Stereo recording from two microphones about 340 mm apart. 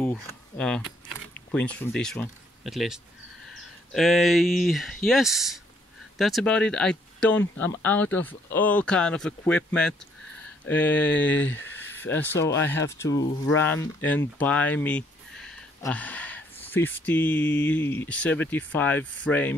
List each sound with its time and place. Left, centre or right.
0.0 s speech: centre
11.1 s speech: left
11.7 s speech: centre